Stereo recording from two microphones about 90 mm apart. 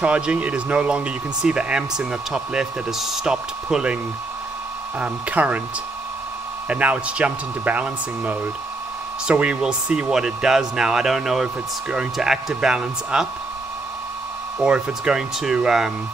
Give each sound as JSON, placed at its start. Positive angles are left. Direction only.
{"t": 0.0, "sound": "speech", "side_deg": -10}
{"t": 6.7, "sound": "speech", "side_deg": -15}
{"t": 14.6, "sound": "speech", "side_deg": -5}